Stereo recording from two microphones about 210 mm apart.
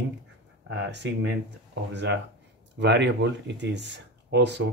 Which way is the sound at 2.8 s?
55° right (ahead or behind).